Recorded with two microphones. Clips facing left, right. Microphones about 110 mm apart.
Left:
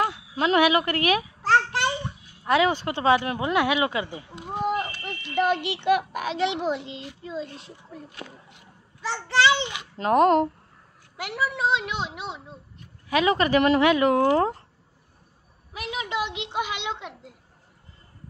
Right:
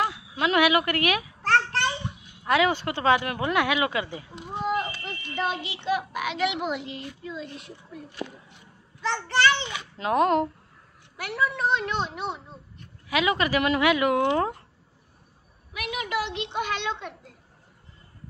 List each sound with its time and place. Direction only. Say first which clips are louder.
0.0 s a woman's voice: left 2 dB; 30° left (ahead or behind)
1.4 s a sound: even; 15° left (ahead or behind)
2.4 s a child's voice: left 1 dB; 25° left (ahead or behind)
5.3 s a child's voice: left 6 dB; 65° left (ahead or behind)
6.1 s a child's voice: left 1 dB; 30° left (ahead or behind)
9.0 s a child's voice: left 1 dB; 15° left (ahead or behind)
9.9 s a woman's voice: left 3 dB; 40° left (ahead or behind)
11.1 s a child's voice: even; 20° left (ahead or behind)
13.1 s a woman's voice: left 3 dB; 35° left (ahead or behind)
15.7 s a sound: even; 30° left (ahead or behind); by 17.1 s 15° left (ahead or behind)